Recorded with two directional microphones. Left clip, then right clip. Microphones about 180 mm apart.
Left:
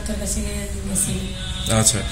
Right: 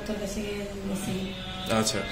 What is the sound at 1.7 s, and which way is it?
Speech, 45° left (ahead or behind).